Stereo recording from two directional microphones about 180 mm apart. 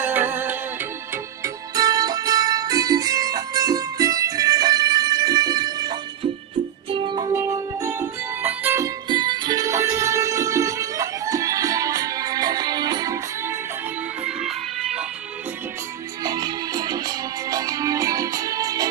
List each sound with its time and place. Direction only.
0.0 s music: 10° right (ahead or behind)
1.7 s music: 20° right (ahead or behind)
7.3 s music: 15° right (ahead or behind)
9.0 s music: 25° right (ahead or behind)
14.3 s music: centre (ahead or behind)
16.2 s music: 20° right (ahead or behind)